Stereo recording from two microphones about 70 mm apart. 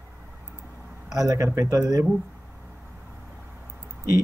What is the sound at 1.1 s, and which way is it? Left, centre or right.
Speech, right.